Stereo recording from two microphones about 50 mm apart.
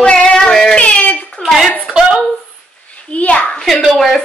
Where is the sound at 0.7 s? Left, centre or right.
Left.